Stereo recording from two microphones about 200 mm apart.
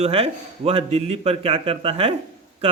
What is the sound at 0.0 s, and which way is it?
A man's voice, 30° right (ahead or behind).